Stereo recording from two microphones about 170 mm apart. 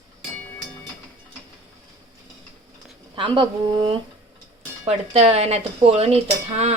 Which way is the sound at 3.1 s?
30° right (ahead or behind).